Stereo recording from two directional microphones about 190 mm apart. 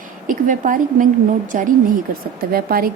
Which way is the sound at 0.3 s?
45° right (ahead or behind).